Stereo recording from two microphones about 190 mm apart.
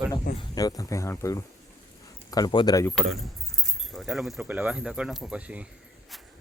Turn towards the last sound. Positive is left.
turn(degrees=-5)  # may be behind; listen again after turning